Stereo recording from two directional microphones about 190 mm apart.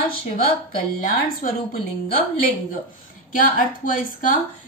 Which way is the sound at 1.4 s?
45° left (ahead or behind).